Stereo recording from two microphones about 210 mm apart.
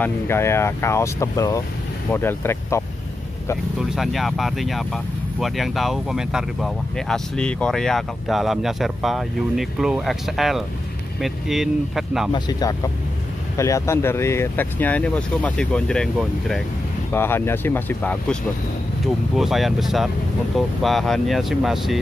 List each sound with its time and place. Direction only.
0.0 s speech: 10° left (ahead or behind)
3.9 s speech: centre (ahead or behind)
12.3 s speech: 20° left (ahead or behind); by 21.9 s centre (ahead or behind)